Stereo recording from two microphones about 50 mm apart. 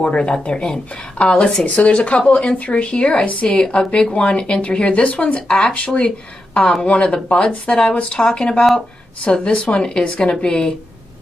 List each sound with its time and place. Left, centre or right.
0.0 s a woman's voice: left